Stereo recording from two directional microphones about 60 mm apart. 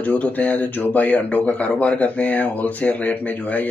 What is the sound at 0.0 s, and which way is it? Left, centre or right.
Speech, left.